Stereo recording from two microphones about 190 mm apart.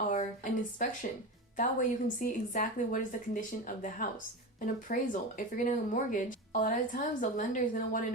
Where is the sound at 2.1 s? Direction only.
45° left (ahead or behind).